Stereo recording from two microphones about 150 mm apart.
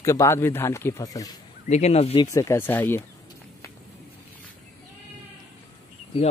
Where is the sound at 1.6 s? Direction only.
50° left (ahead or behind).